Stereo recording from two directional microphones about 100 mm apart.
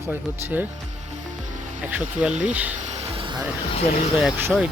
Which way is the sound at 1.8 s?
15° right (ahead or behind).